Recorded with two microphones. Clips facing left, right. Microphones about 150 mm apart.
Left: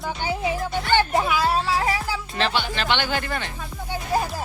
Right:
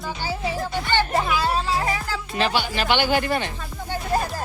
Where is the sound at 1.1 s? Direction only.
5° left (ahead or behind).